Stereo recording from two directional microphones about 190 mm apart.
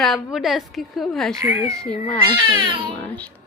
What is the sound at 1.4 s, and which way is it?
Speech, 15° right (ahead or behind).